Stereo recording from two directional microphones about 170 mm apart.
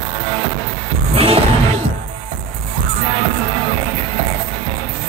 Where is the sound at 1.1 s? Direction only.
35° right (ahead or behind).